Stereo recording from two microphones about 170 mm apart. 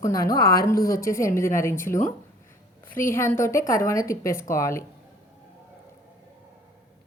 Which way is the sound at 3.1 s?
15° left (ahead or behind).